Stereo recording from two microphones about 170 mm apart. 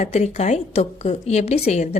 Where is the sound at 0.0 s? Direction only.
40° left (ahead or behind).